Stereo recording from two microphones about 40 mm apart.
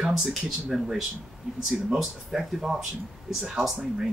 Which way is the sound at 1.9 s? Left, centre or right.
Centre.